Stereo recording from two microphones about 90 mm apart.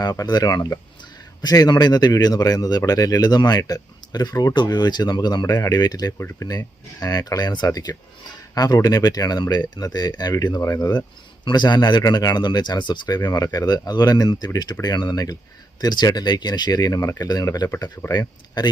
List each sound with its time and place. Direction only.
0.0 s a man's voice: 45° left (ahead or behind)